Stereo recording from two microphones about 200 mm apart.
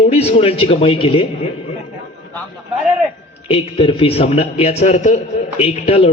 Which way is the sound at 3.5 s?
25° left (ahead or behind).